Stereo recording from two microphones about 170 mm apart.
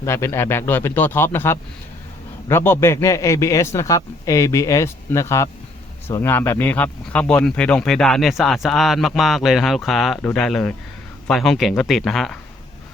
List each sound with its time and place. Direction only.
0.0 s a man's voice: 15° left (ahead or behind)